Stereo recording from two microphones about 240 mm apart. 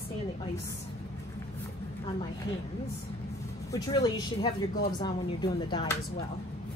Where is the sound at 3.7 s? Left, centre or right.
Centre.